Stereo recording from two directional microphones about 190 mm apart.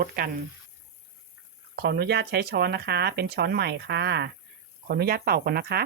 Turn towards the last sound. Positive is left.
turn(degrees=-55)  # may be behind; listen again after turning